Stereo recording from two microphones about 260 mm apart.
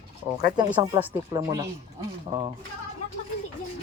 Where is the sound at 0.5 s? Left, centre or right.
Centre.